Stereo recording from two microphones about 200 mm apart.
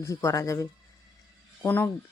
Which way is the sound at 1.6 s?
10° left (ahead or behind).